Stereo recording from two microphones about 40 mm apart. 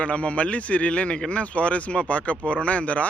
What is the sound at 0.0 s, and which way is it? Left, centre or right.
Speech, left.